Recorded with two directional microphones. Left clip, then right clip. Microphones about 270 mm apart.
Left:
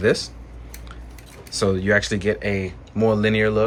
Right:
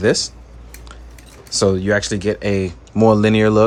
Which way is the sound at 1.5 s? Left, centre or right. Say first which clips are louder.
Right 3 dB; centre.